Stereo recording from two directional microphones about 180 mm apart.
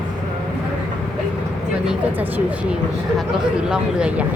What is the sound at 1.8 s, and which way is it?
Speech, 5° right (ahead or behind).